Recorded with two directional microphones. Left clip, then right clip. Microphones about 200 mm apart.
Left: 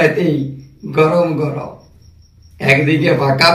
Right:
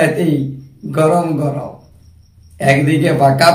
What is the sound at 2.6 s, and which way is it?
Speech, 20° right (ahead or behind).